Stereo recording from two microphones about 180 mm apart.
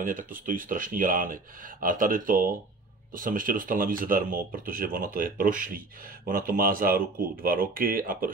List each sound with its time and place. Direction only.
0.0 s speech: 50° right (ahead or behind)